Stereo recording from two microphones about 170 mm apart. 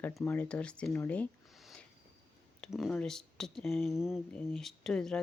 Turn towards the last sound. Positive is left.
turn(degrees=5)  # may be behind; listen again after turning